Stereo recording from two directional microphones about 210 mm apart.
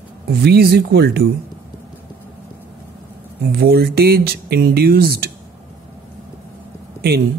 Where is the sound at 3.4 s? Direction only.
45° right (ahead or behind).